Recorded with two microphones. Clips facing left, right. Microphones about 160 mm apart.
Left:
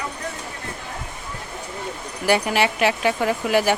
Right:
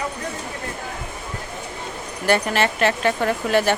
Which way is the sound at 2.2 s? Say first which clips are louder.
Even; 10° left (ahead or behind).